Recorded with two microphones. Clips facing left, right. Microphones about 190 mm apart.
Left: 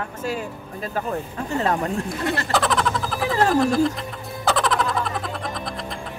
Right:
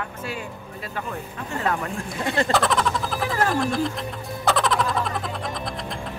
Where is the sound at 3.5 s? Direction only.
Centre (ahead or behind).